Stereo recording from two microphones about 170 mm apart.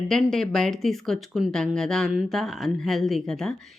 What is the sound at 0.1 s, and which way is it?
Speech, centre (ahead or behind).